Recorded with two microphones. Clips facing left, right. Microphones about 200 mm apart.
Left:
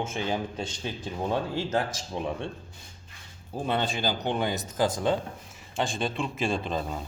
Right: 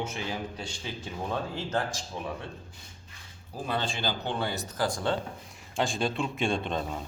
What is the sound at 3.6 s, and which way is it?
Speech, 20° left (ahead or behind).